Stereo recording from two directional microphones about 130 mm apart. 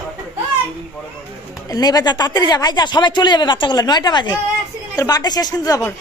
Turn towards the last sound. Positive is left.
turn(degrees=30)  # may be behind; listen again after turning